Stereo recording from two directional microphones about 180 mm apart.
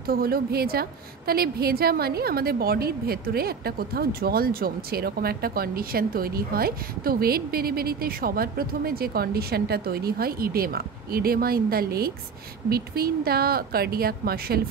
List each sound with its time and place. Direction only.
0.0 s a woman's voice: 55° right (ahead or behind)